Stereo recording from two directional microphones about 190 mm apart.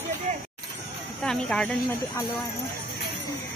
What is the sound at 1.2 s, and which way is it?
Speech, 5° left (ahead or behind).